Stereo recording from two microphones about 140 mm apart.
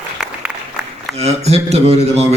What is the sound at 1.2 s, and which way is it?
A man's voice, 50° right (ahead or behind).